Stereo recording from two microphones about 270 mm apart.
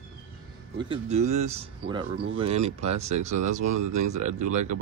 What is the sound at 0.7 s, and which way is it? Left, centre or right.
Speech, centre.